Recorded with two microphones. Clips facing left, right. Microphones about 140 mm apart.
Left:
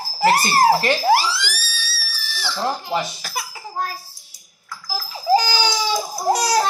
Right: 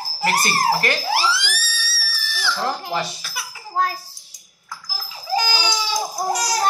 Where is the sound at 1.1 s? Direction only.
40° left (ahead or behind).